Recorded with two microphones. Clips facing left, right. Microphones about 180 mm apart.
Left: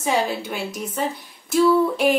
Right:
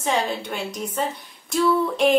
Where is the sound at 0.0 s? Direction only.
5° left (ahead or behind).